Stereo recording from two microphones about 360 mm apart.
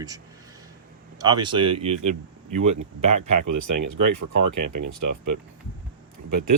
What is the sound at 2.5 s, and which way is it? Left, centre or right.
Speech, right.